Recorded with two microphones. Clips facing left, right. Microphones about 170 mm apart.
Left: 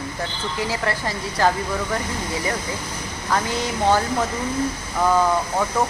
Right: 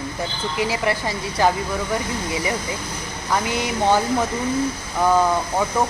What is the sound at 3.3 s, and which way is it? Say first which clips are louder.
Speech: right 1 dB; 15° right (ahead or behind).